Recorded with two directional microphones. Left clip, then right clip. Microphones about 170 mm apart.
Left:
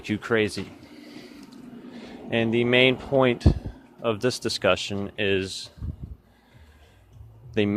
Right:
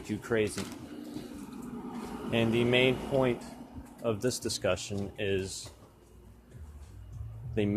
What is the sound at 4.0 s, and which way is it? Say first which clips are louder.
Speech: left 6 dB; 35° left (ahead or behind).